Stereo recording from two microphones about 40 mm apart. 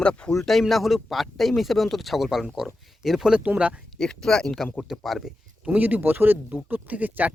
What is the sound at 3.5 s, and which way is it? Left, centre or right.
Speech, right.